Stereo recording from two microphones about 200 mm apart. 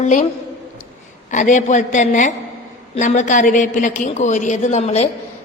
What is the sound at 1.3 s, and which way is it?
A woman's voice, 40° left (ahead or behind).